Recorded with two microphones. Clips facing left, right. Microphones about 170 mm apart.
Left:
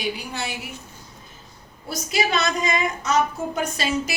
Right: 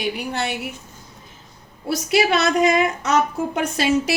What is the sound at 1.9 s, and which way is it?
A woman's voice, 70° right (ahead or behind).